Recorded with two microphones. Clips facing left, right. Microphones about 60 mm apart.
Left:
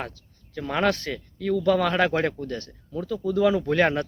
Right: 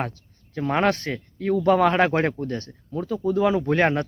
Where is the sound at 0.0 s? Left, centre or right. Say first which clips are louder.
Right 5 dB; right.